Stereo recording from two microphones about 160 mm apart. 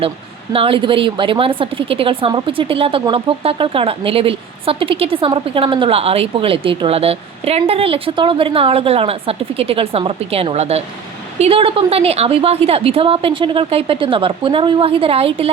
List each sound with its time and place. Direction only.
0.5 s a woman's voice: 35° right (ahead or behind)